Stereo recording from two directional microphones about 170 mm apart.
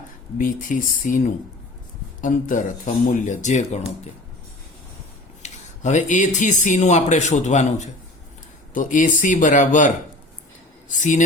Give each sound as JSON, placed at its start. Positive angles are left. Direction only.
{"t": 0.3, "sound": "speech", "side_deg": 50}
{"t": 2.2, "sound": "speech", "side_deg": 50}
{"t": 5.4, "sound": "speech", "side_deg": 45}
{"t": 8.7, "sound": "speech", "side_deg": 50}
{"t": 11.0, "sound": "speech", "side_deg": 45}